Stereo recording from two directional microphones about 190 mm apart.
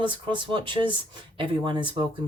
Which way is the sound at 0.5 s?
25° right (ahead or behind).